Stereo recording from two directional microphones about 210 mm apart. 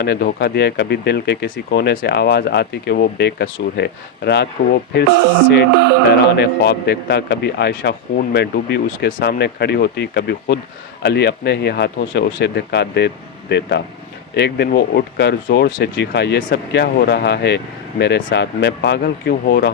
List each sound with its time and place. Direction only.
0.0 s speech: 50° left (ahead or behind)
6.3 s speech: 55° left (ahead or behind)